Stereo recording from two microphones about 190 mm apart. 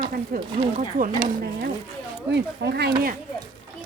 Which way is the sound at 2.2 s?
65° right (ahead or behind).